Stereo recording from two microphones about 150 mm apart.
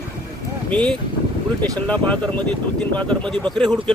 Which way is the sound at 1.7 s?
10° left (ahead or behind).